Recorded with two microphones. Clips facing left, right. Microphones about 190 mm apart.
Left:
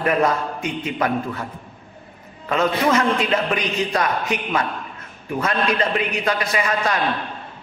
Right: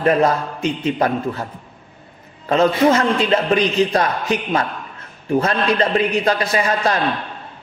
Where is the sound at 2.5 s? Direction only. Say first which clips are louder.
Right 5 dB; 30° right (ahead or behind).